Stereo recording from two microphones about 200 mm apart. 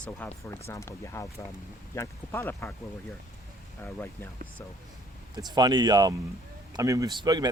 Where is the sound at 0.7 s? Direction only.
15° left (ahead or behind).